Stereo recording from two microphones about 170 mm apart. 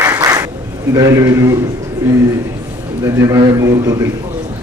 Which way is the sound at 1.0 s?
20° right (ahead or behind).